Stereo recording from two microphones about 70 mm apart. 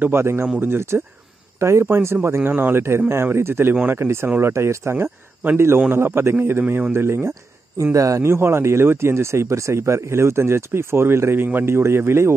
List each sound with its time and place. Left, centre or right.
0.0 s speech: right
2.5 s speech: right
3.1 s speech: right
5.0 s speech: right
7.7 s speech: right